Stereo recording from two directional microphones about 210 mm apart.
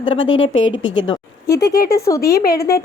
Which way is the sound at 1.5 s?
50° left (ahead or behind).